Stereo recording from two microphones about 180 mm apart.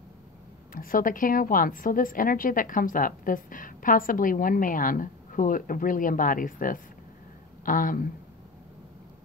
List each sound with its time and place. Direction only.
0.7 s a woman's voice: 50° left (ahead or behind)